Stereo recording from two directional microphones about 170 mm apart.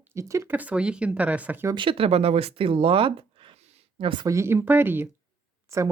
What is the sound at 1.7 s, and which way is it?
Speech, 30° right (ahead or behind).